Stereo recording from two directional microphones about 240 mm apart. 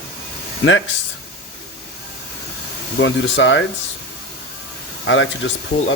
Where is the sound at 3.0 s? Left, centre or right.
Left.